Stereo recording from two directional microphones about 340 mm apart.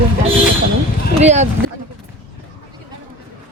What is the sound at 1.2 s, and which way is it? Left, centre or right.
Speech, centre.